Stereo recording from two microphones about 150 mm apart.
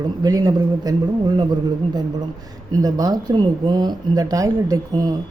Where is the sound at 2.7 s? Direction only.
25° right (ahead or behind).